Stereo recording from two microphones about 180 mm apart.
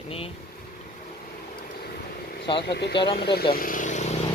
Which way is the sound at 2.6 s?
70° left (ahead or behind).